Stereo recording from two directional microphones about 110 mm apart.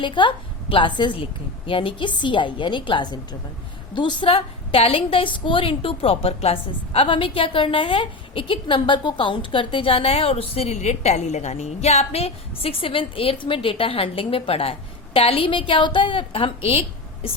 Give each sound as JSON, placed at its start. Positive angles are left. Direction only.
{"t": 0.0, "sound": "a woman's voice", "side_deg": 45}